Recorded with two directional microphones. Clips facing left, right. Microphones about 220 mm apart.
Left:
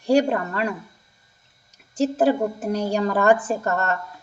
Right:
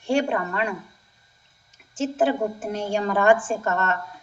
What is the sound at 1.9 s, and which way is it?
A woman's voice, 40° left (ahead or behind).